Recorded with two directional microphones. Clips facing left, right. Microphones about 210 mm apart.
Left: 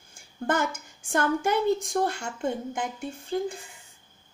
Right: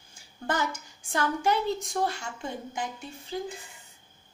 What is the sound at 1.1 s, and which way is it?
A woman's voice, 50° left (ahead or behind).